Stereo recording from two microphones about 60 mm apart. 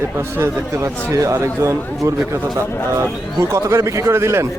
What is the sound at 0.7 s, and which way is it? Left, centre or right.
Speech, right.